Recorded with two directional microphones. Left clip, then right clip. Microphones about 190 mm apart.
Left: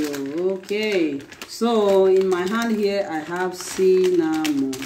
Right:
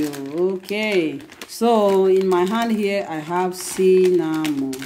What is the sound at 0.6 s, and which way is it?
Speech, 40° right (ahead or behind).